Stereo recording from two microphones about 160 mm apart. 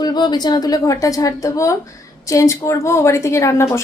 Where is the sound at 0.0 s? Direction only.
25° left (ahead or behind).